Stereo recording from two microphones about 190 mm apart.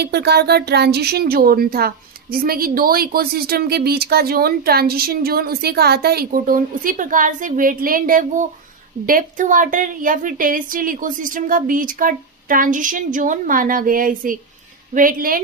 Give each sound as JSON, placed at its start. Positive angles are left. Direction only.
{"t": 0.0, "sound": "speech", "side_deg": -60}